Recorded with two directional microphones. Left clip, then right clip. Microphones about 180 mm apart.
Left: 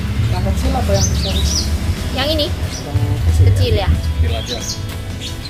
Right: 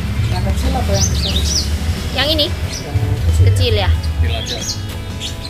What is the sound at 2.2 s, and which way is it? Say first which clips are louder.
Speech: right 2 dB; 5° left (ahead or behind).